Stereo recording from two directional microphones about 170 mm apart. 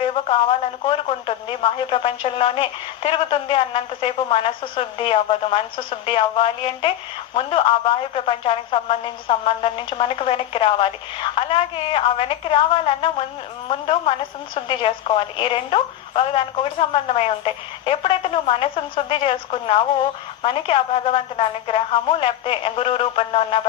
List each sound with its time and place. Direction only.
0.3 s speech: 30° left (ahead or behind)